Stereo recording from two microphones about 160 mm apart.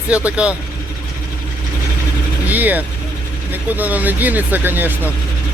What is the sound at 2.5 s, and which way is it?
Speech, 10° right (ahead or behind).